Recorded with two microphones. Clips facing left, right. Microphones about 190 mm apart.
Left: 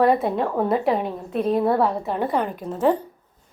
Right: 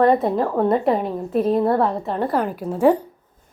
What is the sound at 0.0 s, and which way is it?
A woman's voice, centre (ahead or behind).